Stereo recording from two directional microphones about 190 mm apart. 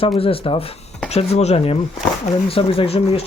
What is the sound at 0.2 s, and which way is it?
Speech, 30° left (ahead or behind).